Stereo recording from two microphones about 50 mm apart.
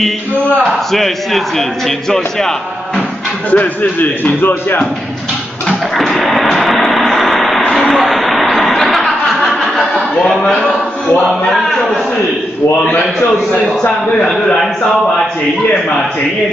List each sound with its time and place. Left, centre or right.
0.9 s a man's voice: centre
3.4 s speech: left
5.7 s a sound: centre
10.4 s a man's voice: centre
11.4 s a sound: centre
14.2 s a man's voice: centre